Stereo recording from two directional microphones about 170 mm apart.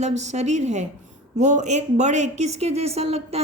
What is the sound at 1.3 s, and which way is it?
Speech, 45° right (ahead or behind).